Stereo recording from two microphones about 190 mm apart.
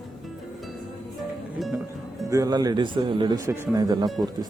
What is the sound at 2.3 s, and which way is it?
Speech, 20° right (ahead or behind).